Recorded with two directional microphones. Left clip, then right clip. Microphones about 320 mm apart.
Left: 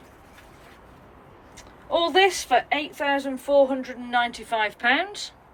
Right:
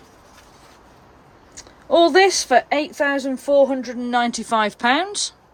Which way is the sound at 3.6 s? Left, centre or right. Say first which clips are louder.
Right 4 dB; right.